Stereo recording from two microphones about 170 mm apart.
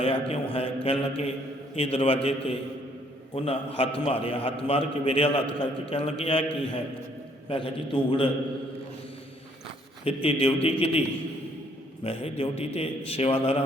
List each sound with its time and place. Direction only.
0.0 s a man's voice: 35° left (ahead or behind)
10.2 s a man's voice: 35° left (ahead or behind)
12.0 s a man's voice: 35° left (ahead or behind)